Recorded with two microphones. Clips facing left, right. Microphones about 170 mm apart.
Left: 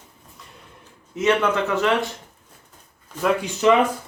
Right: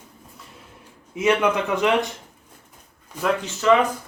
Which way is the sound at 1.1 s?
10° right (ahead or behind).